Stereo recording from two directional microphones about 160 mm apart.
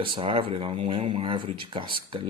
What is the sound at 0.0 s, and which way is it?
Speech, 30° right (ahead or behind).